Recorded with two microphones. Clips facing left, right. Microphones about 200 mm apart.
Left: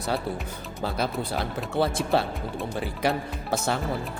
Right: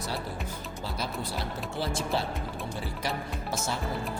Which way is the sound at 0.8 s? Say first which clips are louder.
Left 8 dB; 55° left (ahead or behind).